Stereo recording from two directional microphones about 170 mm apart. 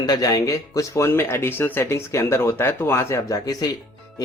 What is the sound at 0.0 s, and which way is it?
Speech, 25° left (ahead or behind).